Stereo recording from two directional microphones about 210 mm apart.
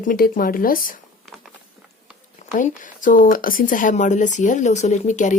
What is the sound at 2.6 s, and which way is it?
Speech, 40° left (ahead or behind).